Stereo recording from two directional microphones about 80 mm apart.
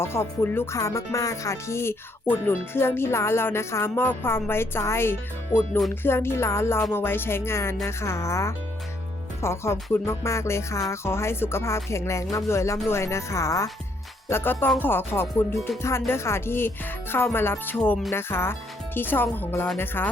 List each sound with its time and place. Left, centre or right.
0.0 s music: left
0.8 s music: left
5.5 s speech: left
5.9 s music: left
14.3 s speech: left
15.8 s music: left
17.3 s speech: left
18.1 s music: left
18.9 s speech: left